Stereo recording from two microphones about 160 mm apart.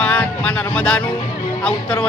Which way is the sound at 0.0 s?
10° left (ahead or behind).